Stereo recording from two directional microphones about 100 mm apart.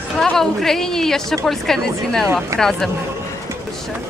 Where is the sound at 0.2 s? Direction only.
5° left (ahead or behind).